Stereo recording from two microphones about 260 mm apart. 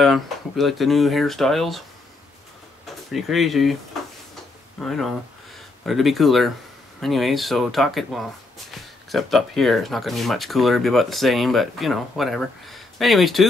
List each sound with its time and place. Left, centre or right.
0.0 s speech: centre
3.1 s speech: centre
4.7 s speech: centre